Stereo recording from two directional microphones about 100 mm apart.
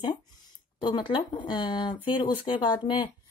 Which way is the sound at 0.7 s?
45° left (ahead or behind).